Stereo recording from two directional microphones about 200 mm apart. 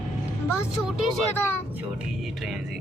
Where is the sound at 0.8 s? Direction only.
Centre (ahead or behind).